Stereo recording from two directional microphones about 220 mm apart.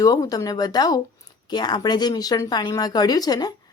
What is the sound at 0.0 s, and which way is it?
Speech, 15° left (ahead or behind).